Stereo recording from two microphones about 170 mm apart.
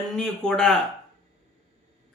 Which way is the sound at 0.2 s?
5° left (ahead or behind).